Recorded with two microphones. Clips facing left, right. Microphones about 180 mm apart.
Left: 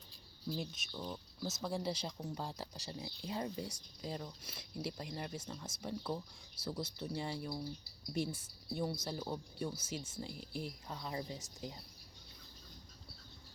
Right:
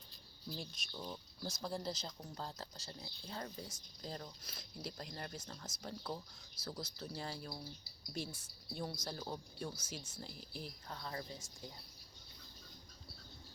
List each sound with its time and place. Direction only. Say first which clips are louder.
0.5 s speech: left 5 dB; 5° left (ahead or behind)
6.6 s speech: left 5 dB; 30° left (ahead or behind)
7.2 s speech: left 5 dB; 5° left (ahead or behind)